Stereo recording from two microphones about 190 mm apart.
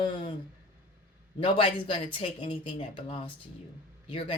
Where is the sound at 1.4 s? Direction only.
25° left (ahead or behind).